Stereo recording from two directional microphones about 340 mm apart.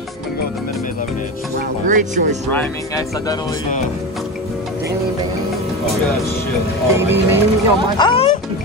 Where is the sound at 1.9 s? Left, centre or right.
Right.